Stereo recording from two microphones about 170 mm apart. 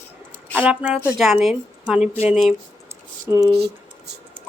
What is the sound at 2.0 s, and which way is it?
Speech, 40° left (ahead or behind).